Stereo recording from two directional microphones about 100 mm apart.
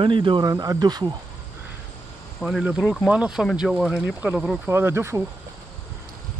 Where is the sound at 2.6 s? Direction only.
10° right (ahead or behind).